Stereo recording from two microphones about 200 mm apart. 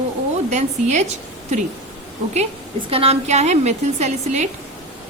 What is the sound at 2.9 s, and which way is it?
A woman's voice, 30° right (ahead or behind).